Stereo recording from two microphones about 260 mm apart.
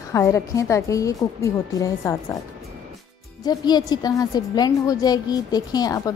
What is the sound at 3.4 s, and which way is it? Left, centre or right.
A woman's voice, centre.